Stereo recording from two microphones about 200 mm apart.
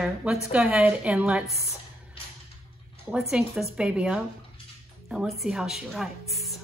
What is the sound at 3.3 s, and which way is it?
A woman's voice, 5° right (ahead or behind).